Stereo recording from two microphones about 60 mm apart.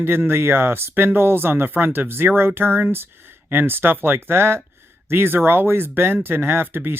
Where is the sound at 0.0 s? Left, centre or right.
Right.